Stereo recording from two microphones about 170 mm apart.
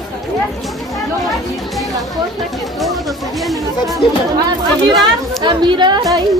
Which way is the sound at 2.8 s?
Centre (ahead or behind).